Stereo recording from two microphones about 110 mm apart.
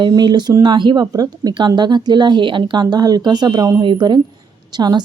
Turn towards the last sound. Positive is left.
turn(degrees=-40)  # may be behind; listen again after turning